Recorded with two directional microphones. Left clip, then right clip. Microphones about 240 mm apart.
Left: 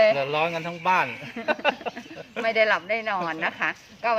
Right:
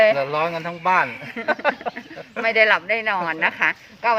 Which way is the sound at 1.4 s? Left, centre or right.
Centre.